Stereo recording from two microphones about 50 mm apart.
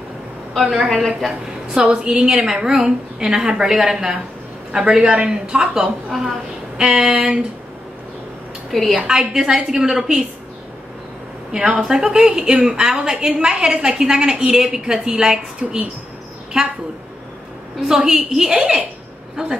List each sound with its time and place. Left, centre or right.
0.6 s a woman's voice: centre
1.7 s a woman's voice: right
6.1 s a woman's voice: centre
6.8 s a sound: centre
8.6 s a woman's voice: centre
8.9 s a woman's voice: centre
11.5 s a woman's voice: centre
17.7 s a woman's voice: centre
18.6 s a sound: right